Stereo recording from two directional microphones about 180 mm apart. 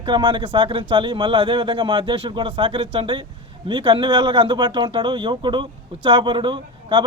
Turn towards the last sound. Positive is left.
turn(degrees=-25)  # may be behind; listen again after turning